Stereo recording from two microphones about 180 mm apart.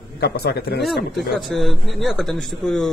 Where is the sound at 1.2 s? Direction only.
Centre (ahead or behind).